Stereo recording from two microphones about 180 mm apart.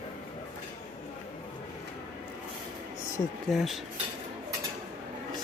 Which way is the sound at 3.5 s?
5° left (ahead or behind).